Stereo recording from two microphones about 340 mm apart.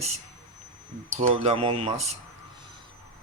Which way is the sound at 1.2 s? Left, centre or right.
Centre.